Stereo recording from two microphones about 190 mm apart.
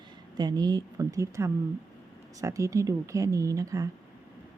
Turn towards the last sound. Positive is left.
turn(degrees=-15)  # may be behind; listen again after turning